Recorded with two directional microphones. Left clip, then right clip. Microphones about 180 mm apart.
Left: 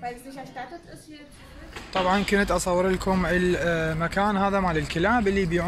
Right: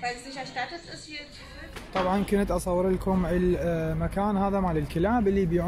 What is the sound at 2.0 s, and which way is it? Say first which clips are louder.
Speech: left 4 dB; 5° right (ahead or behind).